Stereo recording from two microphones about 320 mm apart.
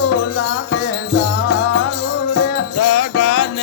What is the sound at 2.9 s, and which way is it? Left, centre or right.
Music, left.